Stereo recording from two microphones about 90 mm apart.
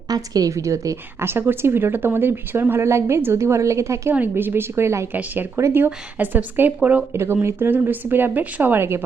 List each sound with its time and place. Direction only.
0.1 s a woman's voice: 45° right (ahead or behind)
4.1 s a woman's voice: 20° right (ahead or behind)